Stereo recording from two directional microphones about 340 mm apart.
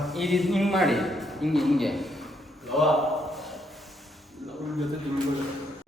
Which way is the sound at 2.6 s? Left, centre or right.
Centre.